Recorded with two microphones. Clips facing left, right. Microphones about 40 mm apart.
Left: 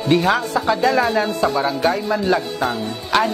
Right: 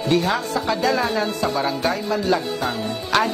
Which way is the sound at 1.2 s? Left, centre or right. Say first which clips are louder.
Left 3 dB; centre.